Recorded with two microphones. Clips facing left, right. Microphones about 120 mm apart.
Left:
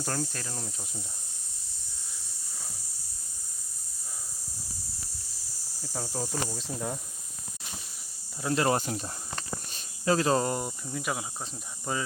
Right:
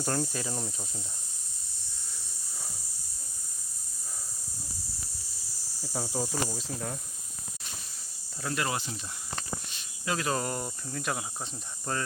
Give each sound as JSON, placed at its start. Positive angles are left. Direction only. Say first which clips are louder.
{"t": 0.0, "sound": "cricket", "louder": "right 2 dB", "side_deg": -5}
{"t": 5.8, "sound": "cricket", "louder": "right 2 dB", "side_deg": -5}
{"t": 6.7, "sound": "speech", "louder": "left 5 dB", "side_deg": 10}
{"t": 8.5, "sound": "speech", "louder": "left 7 dB", "side_deg": 35}
{"t": 8.8, "sound": "speech", "louder": "left 6 dB", "side_deg": 45}